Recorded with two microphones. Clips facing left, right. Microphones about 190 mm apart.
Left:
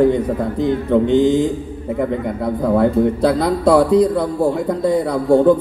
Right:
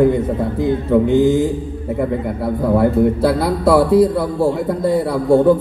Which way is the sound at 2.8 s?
20° left (ahead or behind).